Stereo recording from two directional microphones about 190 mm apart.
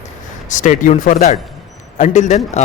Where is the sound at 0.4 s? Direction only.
40° left (ahead or behind).